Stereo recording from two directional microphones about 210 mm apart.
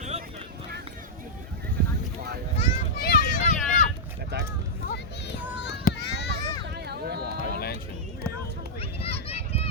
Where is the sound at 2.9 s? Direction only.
45° left (ahead or behind).